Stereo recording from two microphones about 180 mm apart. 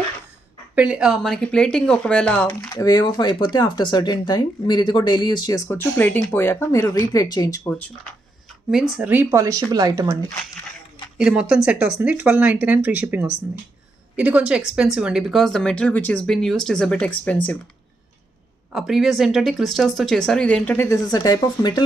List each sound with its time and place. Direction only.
0.7 s speech: 5° right (ahead or behind)
2.7 s speech: 20° left (ahead or behind)
5.7 s speech: 10° left (ahead or behind)
8.6 s speech: centre (ahead or behind); by 10.0 s 20° right (ahead or behind)
11.1 s speech: 5° right (ahead or behind)
18.7 s speech: centre (ahead or behind); by 21.8 s 20° left (ahead or behind)